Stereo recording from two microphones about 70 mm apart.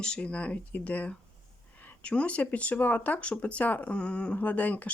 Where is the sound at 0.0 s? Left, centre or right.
Centre.